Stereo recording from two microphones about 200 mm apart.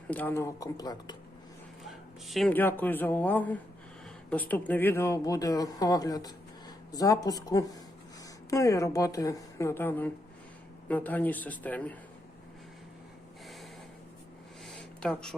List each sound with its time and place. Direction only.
0.1 s speech: 10° left (ahead or behind)
1.8 s speech: centre (ahead or behind)
14.8 s a sound: 5° left (ahead or behind)